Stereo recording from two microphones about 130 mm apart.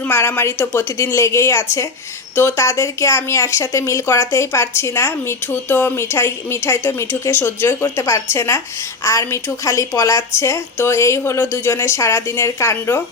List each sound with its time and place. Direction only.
0.1 s speech: 15° left (ahead or behind)